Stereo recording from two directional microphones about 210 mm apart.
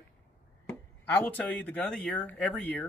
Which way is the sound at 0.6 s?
10° left (ahead or behind).